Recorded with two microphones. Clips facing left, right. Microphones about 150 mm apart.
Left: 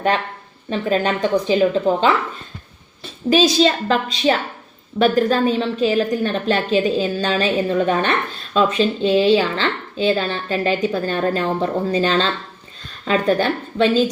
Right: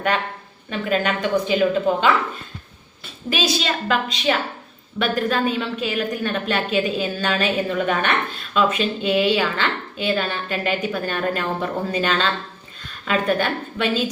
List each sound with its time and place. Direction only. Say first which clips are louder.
0.7 s a woman's voice: left 3 dB; 35° left (ahead or behind)
3.2 s a woman's voice: left 8 dB; 35° left (ahead or behind)